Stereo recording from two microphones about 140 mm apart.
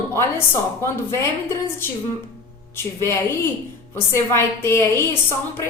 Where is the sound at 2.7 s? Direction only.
20° left (ahead or behind).